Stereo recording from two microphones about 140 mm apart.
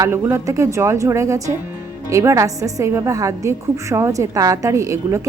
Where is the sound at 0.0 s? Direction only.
20° right (ahead or behind).